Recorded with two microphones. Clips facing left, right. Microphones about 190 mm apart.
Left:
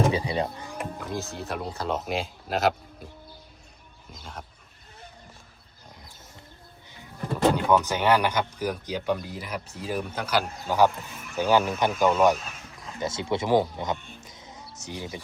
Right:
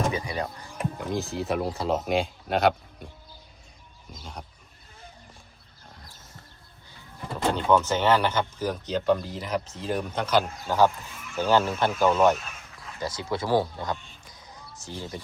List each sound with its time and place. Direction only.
0.1 s speech: 30° left (ahead or behind)
0.9 s speech: centre (ahead or behind)
4.1 s speech: centre (ahead or behind)
7.5 s speech: 10° left (ahead or behind)
13.0 s speech: 25° left (ahead or behind)
14.3 s a sound: 20° left (ahead or behind)